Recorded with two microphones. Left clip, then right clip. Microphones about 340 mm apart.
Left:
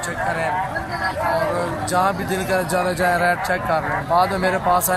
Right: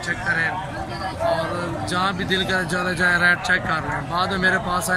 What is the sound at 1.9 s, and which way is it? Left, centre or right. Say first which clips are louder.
Speech: left 2 dB; centre.